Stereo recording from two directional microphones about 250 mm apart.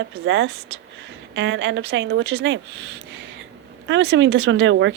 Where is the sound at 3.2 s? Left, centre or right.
Right.